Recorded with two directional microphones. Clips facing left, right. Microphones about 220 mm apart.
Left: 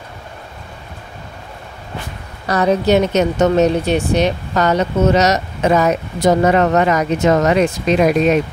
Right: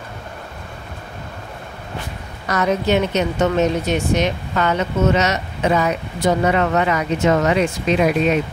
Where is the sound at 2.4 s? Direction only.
35° left (ahead or behind).